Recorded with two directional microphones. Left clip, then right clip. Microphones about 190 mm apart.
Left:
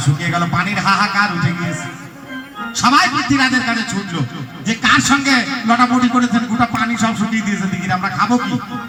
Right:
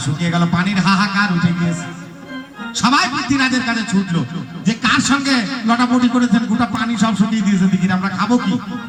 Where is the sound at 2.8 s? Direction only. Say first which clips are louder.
Left 3 dB; 30° right (ahead or behind).